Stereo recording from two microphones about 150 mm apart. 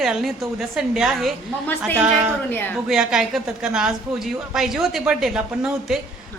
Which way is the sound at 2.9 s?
5° right (ahead or behind).